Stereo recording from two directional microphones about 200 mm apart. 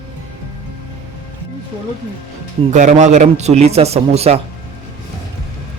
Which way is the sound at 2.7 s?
35° right (ahead or behind).